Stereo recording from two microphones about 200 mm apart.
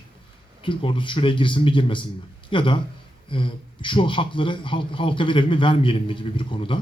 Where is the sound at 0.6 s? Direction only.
25° left (ahead or behind).